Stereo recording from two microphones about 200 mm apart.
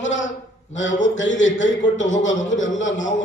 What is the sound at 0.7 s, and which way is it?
Speech, 70° left (ahead or behind).